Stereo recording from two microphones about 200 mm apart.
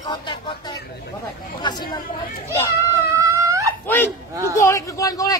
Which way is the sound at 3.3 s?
15° right (ahead or behind).